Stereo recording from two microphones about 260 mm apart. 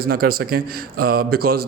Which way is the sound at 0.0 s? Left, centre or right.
Right.